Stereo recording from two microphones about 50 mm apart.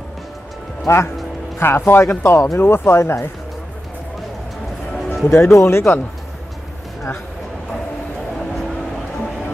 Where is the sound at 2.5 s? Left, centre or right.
Left.